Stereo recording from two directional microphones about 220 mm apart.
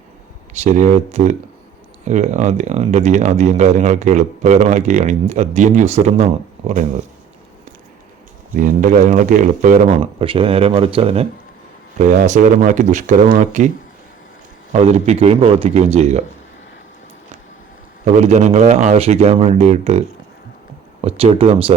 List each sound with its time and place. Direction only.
0.5 s speech: 30° right (ahead or behind)
8.5 s speech: 35° right (ahead or behind)
14.7 s a man's voice: 30° right (ahead or behind)
18.0 s a man's voice: 30° right (ahead or behind)